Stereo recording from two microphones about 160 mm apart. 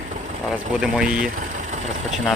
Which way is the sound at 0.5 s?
5° right (ahead or behind).